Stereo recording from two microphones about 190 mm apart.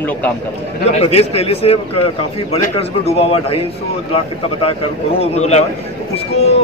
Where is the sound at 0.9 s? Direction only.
30° left (ahead or behind).